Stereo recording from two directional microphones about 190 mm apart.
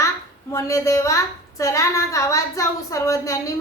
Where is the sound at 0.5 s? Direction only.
15° left (ahead or behind).